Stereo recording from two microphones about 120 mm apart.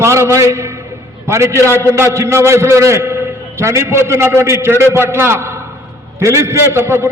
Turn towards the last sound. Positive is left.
turn(degrees=-20)  # may be behind; listen again after turning